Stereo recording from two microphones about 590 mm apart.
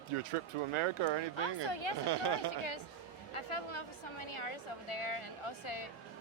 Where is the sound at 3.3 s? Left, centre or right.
Left.